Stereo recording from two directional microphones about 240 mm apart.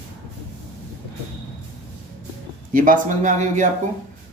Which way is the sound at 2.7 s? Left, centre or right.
Right.